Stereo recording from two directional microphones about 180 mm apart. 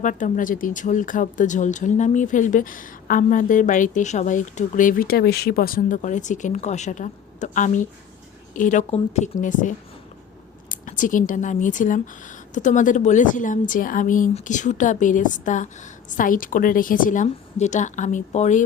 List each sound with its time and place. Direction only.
0.0 s speech: 45° left (ahead or behind)